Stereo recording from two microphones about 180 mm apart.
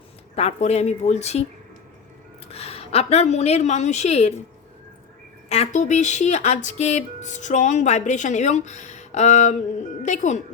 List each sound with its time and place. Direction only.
0.3 s speech: 35° left (ahead or behind)
2.5 s a woman's voice: 35° left (ahead or behind)
5.5 s speech: 40° left (ahead or behind)